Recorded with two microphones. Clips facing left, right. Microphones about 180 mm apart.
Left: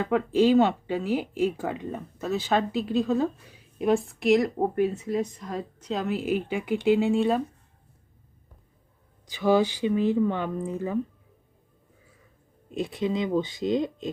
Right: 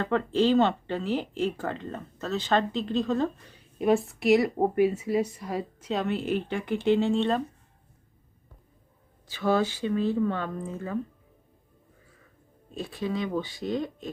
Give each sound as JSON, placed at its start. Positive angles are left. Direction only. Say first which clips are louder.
{"t": 0.0, "sound": "speech", "louder": "left 2 dB", "side_deg": 10}
{"t": 9.2, "sound": "speech", "louder": "left 3 dB", "side_deg": 15}
{"t": 12.7, "sound": "speech", "louder": "left 4 dB", "side_deg": 20}